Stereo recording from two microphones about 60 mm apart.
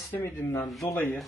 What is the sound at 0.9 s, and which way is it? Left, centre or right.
Speech, left.